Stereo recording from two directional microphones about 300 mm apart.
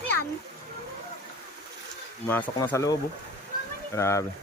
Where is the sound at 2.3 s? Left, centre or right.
Centre.